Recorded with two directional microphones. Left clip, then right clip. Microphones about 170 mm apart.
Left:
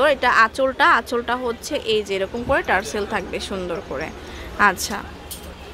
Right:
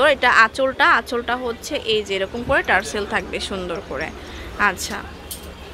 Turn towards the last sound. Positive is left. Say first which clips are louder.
# left 2 dB
turn(degrees=25)  # may be behind; listen again after turning